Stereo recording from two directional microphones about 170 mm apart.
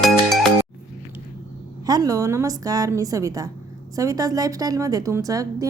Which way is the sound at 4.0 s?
20° right (ahead or behind).